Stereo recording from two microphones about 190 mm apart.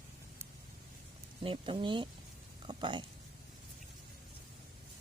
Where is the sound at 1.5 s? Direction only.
25° right (ahead or behind).